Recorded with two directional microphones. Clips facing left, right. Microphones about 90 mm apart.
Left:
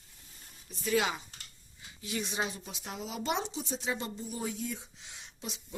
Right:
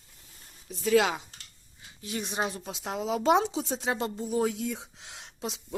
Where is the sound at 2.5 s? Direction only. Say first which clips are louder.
Right 7 dB; 90° right.